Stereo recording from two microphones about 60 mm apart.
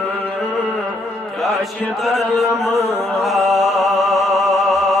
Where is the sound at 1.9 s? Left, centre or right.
Centre.